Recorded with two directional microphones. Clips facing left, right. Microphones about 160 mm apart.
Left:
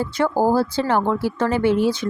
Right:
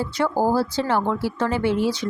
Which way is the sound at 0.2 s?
50° left (ahead or behind).